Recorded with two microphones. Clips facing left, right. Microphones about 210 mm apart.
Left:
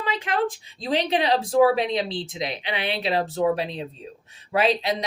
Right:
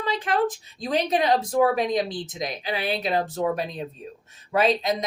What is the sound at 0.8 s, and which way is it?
Speech, 30° left (ahead or behind).